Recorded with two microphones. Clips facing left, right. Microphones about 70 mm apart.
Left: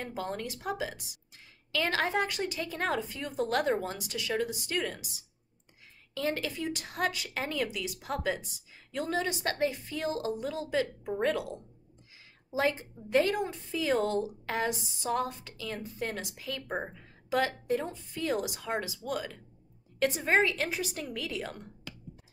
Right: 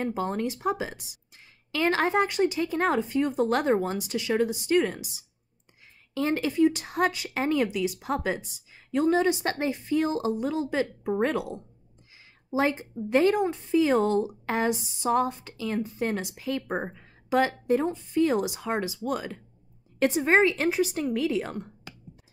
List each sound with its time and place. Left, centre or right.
0.0 s speech: right
6.1 s speech: right
12.5 s speech: right